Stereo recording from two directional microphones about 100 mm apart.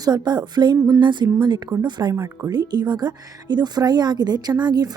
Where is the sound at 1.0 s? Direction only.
50° right (ahead or behind).